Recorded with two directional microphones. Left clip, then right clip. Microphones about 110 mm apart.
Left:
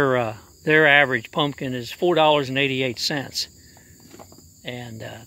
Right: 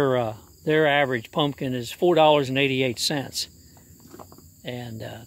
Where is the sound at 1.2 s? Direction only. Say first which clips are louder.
Left 1 dB; 15° right (ahead or behind).